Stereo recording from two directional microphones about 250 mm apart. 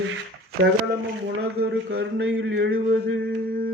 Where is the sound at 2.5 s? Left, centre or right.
Right.